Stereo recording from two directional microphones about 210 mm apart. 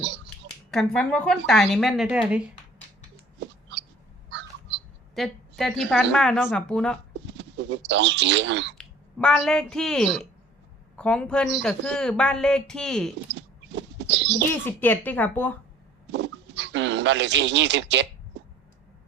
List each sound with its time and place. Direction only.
0.7 s speech: 5° left (ahead or behind)
3.4 s a sound: 55° right (ahead or behind)
4.3 s crow: 55° right (ahead or behind)
5.1 s speech: centre (ahead or behind)
7.3 s speech: 60° right (ahead or behind)
8.8 s speech: 5° left (ahead or behind)
13.3 s a sound: 60° right (ahead or behind)
14.5 s speech: 10° left (ahead or behind)
16.1 s speech: 55° right (ahead or behind)